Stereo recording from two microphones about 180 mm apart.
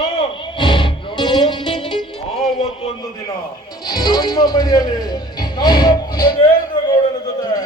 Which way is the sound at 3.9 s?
25° left (ahead or behind).